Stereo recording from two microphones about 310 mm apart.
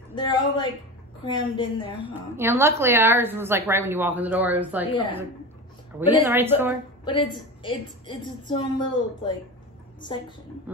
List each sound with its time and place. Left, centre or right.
0.1 s a sound: centre
1.2 s a woman's voice: centre
2.3 s a woman's voice: centre
4.9 s a woman's voice: centre
5.9 s a woman's voice: centre
7.6 s a woman's voice: centre